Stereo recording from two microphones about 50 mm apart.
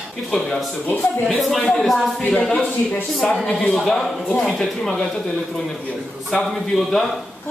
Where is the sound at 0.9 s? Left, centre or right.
Left.